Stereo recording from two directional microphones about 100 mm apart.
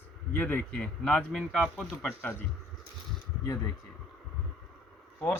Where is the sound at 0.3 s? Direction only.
20° left (ahead or behind).